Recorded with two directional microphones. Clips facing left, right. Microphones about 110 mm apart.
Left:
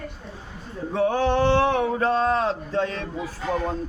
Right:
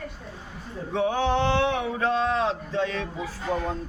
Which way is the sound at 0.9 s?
40° left (ahead or behind).